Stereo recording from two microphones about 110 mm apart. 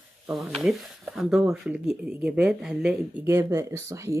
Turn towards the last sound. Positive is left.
turn(degrees=-25)  # may be behind; listen again after turning